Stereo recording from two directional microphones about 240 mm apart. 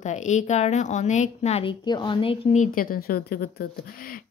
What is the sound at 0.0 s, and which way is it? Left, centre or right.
A woman's voice, left.